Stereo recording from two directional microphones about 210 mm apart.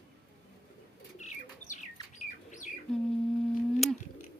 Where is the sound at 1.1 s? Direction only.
35° left (ahead or behind).